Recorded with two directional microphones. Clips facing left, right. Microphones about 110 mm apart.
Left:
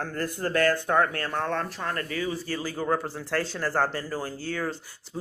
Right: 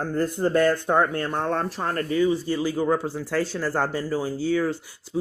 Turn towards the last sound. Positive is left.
turn(degrees=-15)  # may be behind; listen again after turning